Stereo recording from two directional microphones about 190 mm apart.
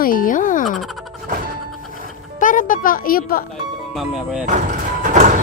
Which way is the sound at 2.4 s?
45° left (ahead or behind).